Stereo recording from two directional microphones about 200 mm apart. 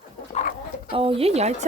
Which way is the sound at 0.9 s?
25° right (ahead or behind).